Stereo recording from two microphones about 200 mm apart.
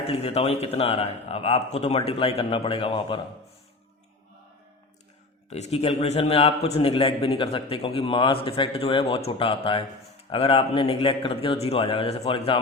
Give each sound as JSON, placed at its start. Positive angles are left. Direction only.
{"t": 0.1, "sound": "a man's voice", "side_deg": 30}
{"t": 5.5, "sound": "a man's voice", "side_deg": 35}